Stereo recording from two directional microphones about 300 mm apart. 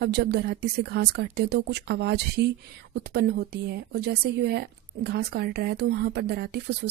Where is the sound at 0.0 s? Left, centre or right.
Right.